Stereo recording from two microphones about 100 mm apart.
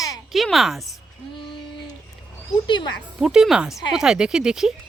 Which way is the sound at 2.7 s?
50° left (ahead or behind).